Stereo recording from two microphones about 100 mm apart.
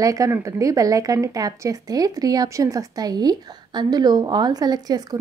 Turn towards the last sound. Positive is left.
turn(degrees=-40)  # may be behind; listen again after turning